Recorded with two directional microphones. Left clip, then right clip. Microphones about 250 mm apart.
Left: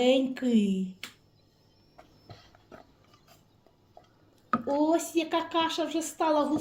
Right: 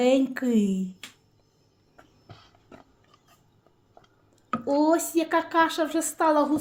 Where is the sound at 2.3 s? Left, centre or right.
Centre.